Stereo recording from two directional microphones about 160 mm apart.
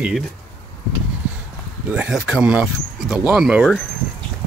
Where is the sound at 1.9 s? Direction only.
5° right (ahead or behind).